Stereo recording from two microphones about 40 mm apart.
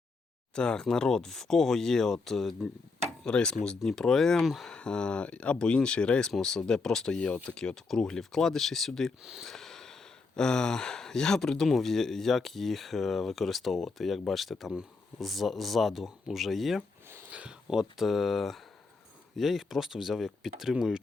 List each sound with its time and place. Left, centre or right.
0.5 s speech: left
3.2 s speech: left; by 4.7 s centre
4.7 s speech: left
6.3 s speech: centre
17.3 s a sound: right
17.7 s speech: centre